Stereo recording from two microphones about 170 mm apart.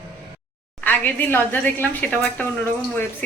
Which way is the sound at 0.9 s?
10° left (ahead or behind).